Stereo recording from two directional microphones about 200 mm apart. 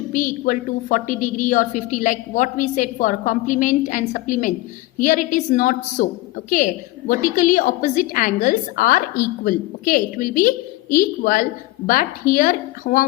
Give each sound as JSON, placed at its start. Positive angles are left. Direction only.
{"t": 0.1, "sound": "a woman's voice", "side_deg": 45}